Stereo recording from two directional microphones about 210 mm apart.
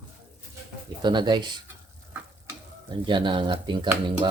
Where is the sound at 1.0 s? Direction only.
20° right (ahead or behind).